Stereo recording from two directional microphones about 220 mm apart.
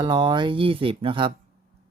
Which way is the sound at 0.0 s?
20° right (ahead or behind).